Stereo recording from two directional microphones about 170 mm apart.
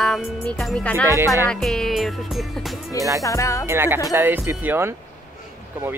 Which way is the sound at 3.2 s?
20° left (ahead or behind).